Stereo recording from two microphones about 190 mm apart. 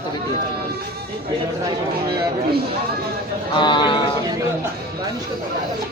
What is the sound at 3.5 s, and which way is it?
Speech, 25° left (ahead or behind).